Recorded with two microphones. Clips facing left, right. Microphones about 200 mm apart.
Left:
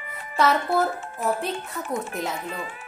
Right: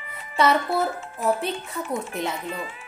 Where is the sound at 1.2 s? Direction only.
Centre (ahead or behind).